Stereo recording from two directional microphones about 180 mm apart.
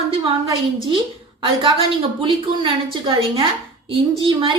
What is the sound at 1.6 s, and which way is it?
A woman's voice, 25° right (ahead or behind).